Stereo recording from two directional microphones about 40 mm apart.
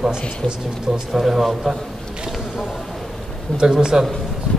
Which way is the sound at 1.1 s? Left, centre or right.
Centre.